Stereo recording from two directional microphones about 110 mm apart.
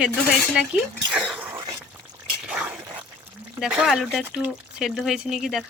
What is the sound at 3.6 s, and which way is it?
Speech, 5° right (ahead or behind).